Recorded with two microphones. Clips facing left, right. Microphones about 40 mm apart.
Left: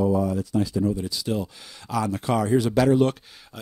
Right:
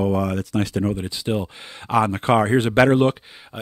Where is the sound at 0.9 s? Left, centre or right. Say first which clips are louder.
Right 2 dB; right.